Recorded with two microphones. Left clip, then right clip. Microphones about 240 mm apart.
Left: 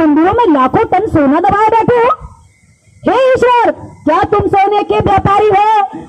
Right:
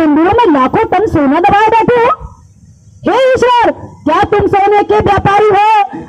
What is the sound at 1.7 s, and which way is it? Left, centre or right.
A man's voice, right.